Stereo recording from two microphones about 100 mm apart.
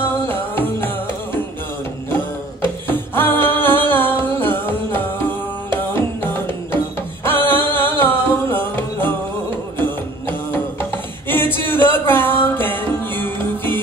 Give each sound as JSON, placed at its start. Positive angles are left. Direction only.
{"t": 0.0, "sound": "music", "side_deg": 20}
{"t": 2.9, "sound": "music", "side_deg": 20}